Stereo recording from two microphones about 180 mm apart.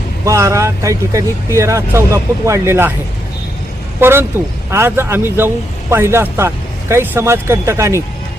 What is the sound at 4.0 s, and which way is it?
A man's voice, 15° right (ahead or behind).